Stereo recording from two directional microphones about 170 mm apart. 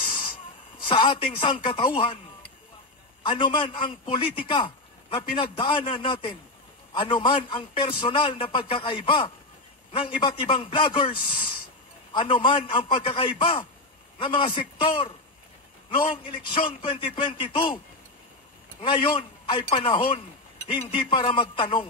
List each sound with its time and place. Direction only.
0.0 s hiss: 30° left (ahead or behind)
0.8 s a man's voice: 30° left (ahead or behind)
3.3 s a man's voice: 30° left (ahead or behind)
18.8 s a man's voice: 30° left (ahead or behind)